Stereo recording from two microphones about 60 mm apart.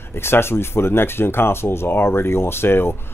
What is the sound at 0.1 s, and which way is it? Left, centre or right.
Speech, left.